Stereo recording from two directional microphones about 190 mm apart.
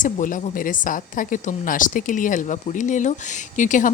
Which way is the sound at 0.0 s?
40° left (ahead or behind).